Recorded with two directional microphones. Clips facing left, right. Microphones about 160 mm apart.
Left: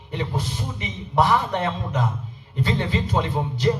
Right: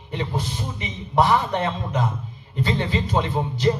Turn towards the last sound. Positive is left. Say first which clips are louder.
# right 1 dB
turn(degrees=-20)  # may be behind; listen again after turning